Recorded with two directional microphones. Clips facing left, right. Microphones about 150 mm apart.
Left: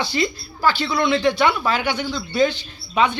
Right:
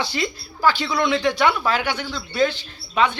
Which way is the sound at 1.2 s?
10° right (ahead or behind).